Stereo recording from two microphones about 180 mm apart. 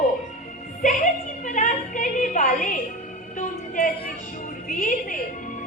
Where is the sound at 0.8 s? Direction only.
40° left (ahead or behind).